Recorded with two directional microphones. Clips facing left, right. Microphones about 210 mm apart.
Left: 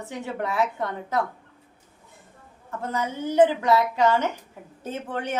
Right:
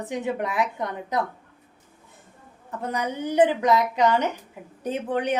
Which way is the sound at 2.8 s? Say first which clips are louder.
Right 1 dB; 15° right (ahead or behind).